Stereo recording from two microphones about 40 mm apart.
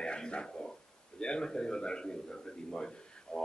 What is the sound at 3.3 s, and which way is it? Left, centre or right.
Speech, left.